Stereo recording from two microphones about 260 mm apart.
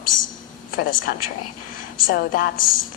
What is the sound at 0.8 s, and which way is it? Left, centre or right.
A woman's voice, left.